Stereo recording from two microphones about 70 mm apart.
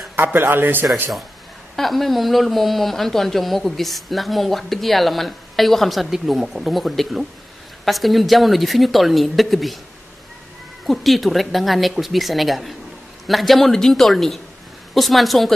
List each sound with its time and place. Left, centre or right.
0.1 s a man's voice: right
1.8 s speech: centre
10.9 s speech: centre